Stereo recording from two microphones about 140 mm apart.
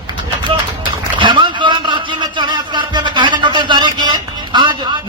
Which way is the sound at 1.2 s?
35° right (ahead or behind).